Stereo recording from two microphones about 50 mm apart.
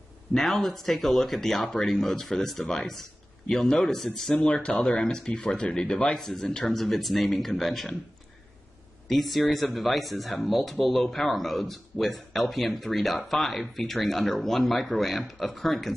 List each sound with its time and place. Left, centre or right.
0.3 s speech: centre
9.0 s speech: centre